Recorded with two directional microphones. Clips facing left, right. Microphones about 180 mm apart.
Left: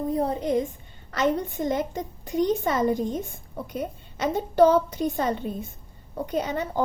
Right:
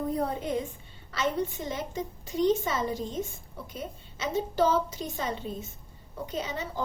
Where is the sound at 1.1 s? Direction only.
50° left (ahead or behind).